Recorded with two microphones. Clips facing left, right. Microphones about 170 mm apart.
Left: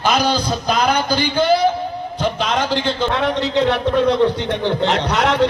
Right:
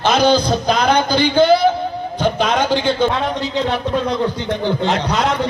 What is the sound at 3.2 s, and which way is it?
A man's voice, 75° left (ahead or behind).